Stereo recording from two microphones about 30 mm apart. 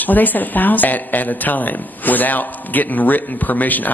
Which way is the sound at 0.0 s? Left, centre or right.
Left.